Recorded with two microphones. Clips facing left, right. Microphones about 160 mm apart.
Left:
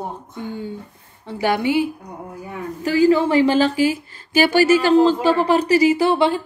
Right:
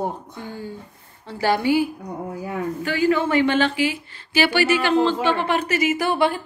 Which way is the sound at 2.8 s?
35° left (ahead or behind).